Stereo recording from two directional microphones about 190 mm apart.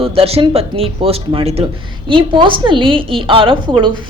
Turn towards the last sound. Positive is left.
turn(degrees=-25)  # may be behind; listen again after turning